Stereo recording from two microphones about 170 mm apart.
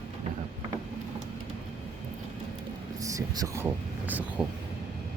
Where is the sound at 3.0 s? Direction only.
20° right (ahead or behind).